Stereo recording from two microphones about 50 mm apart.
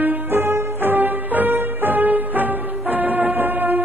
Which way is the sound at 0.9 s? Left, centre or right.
Right.